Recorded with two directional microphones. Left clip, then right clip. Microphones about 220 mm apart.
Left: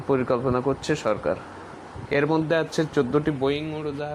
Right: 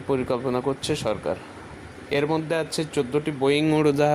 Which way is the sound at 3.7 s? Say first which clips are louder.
Right 11 dB; 45° right (ahead or behind).